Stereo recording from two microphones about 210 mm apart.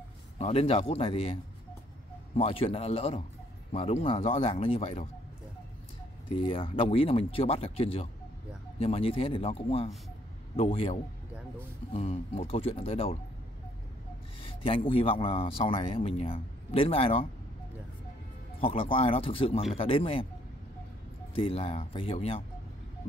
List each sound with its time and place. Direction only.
0.4 s a man's voice: 30° left (ahead or behind)
6.3 s a man's voice: 25° left (ahead or behind)
14.4 s a man's voice: 25° left (ahead or behind)
18.6 s a man's voice: 25° left (ahead or behind)
21.4 s a man's voice: 25° left (ahead or behind)